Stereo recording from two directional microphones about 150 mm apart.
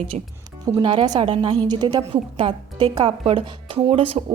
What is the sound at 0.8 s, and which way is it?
A woman's voice, 30° right (ahead or behind).